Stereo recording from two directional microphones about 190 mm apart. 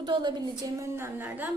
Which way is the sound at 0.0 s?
25° right (ahead or behind).